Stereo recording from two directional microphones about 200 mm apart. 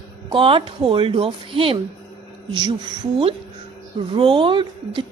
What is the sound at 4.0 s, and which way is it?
A woman's voice, 25° right (ahead or behind).